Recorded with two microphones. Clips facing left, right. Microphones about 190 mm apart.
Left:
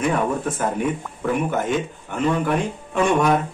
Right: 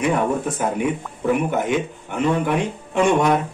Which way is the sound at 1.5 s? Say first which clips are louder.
Right 1 dB; 15° right (ahead or behind).